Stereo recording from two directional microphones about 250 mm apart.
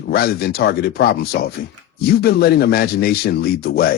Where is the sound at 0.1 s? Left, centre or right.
Left.